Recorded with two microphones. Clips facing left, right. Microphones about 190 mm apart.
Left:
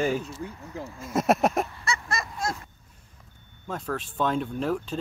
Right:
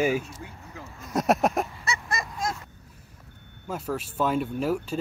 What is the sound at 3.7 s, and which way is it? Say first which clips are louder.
Speech: right 1 dB; 5° right (ahead or behind).